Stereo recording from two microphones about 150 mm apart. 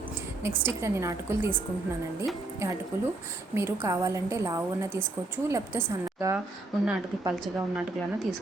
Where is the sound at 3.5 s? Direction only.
20° right (ahead or behind).